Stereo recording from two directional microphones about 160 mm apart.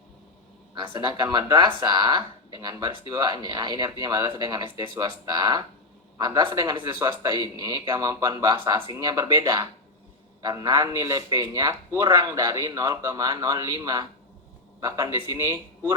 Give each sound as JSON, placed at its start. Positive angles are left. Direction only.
{"t": 0.7, "sound": "a man's voice", "side_deg": -25}
{"t": 10.4, "sound": "a man's voice", "side_deg": -20}